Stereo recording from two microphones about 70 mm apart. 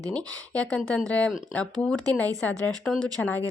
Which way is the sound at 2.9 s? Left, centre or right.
Centre.